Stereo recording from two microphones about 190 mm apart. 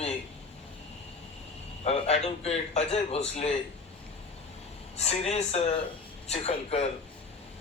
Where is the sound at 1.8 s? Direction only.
35° left (ahead or behind).